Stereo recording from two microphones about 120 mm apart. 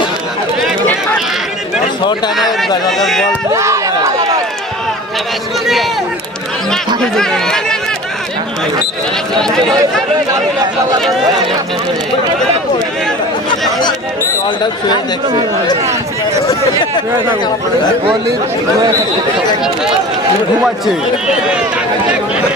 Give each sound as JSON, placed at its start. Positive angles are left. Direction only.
{"t": 2.9, "sound": "a man's voice", "side_deg": 0}
{"t": 3.5, "sound": "speech", "side_deg": -25}
{"t": 7.2, "sound": "a man's voice", "side_deg": 5}
{"t": 9.3, "sound": "a man's voice", "side_deg": 5}
{"t": 20.6, "sound": "a man's voice", "side_deg": -5}